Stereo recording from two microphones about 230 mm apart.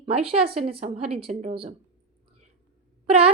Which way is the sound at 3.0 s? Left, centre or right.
Right.